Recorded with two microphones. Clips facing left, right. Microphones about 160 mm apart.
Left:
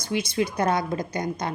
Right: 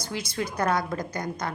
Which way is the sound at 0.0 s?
20° left (ahead or behind).